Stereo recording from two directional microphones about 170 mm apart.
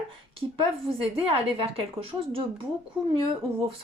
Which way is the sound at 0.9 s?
30° right (ahead or behind).